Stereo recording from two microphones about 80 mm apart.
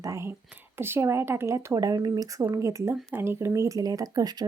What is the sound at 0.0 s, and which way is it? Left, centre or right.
Speech, right.